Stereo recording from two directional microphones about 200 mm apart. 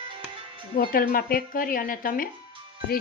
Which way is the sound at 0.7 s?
45° left (ahead or behind).